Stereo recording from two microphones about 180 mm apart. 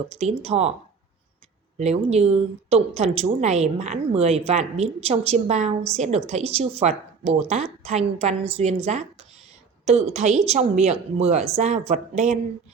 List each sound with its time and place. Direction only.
0.1 s a woman's voice: 35° right (ahead or behind)
1.8 s a woman's voice: 35° right (ahead or behind)